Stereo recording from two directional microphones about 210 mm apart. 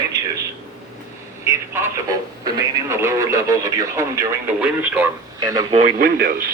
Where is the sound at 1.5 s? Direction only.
15° right (ahead or behind).